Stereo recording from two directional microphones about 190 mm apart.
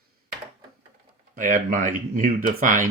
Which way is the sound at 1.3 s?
45° right (ahead or behind).